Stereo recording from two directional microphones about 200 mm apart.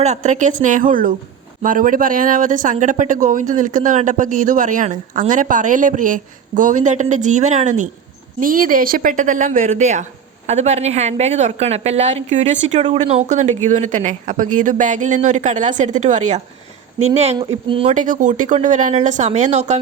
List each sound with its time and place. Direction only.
0.0 s speech: 35° right (ahead or behind)
17.1 s speech: 25° right (ahead or behind)